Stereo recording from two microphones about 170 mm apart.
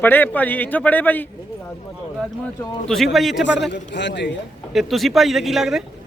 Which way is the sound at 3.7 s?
90° left.